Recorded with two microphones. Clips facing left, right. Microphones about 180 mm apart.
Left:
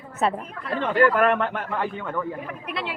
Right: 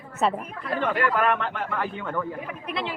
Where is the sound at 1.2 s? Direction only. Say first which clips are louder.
Left 3 dB; 50° left (ahead or behind).